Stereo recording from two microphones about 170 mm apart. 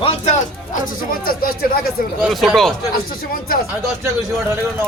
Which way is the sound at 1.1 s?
60° left (ahead or behind).